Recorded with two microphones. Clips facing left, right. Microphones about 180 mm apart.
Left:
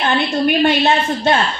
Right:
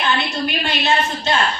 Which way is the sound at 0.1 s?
55° left (ahead or behind).